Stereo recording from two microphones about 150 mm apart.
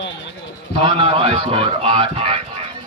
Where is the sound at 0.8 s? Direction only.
35° right (ahead or behind).